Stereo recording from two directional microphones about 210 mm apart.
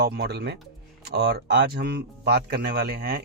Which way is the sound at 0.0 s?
50° right (ahead or behind).